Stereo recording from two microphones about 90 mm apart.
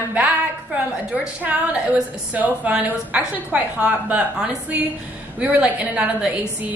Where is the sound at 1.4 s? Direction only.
15° right (ahead or behind).